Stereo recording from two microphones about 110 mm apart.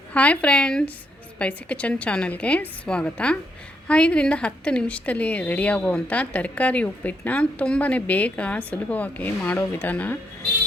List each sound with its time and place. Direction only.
0.1 s speech: 10° left (ahead or behind)